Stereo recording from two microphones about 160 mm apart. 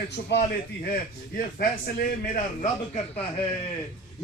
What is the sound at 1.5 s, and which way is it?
A man's voice, 65° left (ahead or behind).